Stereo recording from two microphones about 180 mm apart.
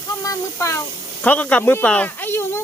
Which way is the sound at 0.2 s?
15° left (ahead or behind).